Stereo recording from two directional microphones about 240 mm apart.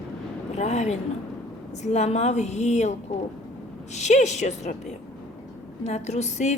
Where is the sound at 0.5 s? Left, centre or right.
Left.